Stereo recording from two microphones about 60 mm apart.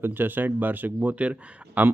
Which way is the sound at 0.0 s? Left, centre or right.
Right.